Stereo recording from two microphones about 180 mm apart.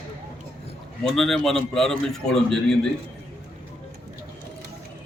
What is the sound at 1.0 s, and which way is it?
A man's voice, centre (ahead or behind).